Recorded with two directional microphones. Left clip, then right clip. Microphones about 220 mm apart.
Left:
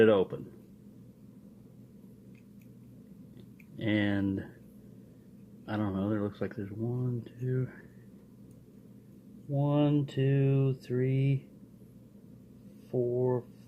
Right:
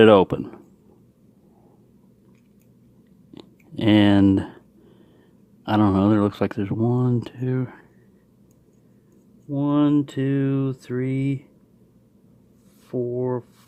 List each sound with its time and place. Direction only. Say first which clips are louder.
0.0 s speech: right 10 dB; 45° right (ahead or behind)
3.3 s speech: right 14 dB; 45° right (ahead or behind)
5.6 s speech: right 15 dB; 45° right (ahead or behind)
9.5 s speech: right 9 dB; 45° right (ahead or behind)
12.9 s speech: right 4 dB; 45° right (ahead or behind)